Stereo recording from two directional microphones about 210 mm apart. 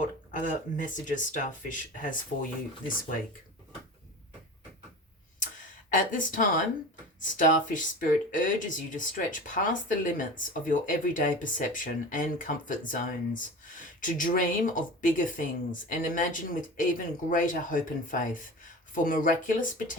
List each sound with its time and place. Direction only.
0.0 s speech: 35° left (ahead or behind)
5.9 s speech: 40° left (ahead or behind)